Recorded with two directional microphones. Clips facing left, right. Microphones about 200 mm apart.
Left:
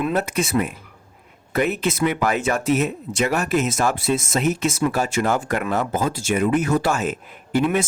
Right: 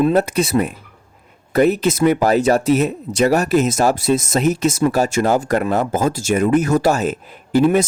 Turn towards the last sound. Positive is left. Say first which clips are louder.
# right 6 dB
turn(degrees=-35)  # may be behind; listen again after turning